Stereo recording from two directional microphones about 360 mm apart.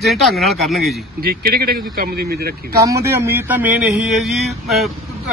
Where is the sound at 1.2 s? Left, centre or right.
Right.